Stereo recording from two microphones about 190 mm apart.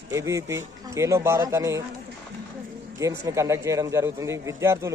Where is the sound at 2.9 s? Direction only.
15° right (ahead or behind).